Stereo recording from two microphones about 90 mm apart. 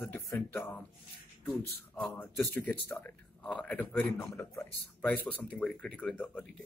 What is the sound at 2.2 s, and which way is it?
Speech, 20° left (ahead or behind).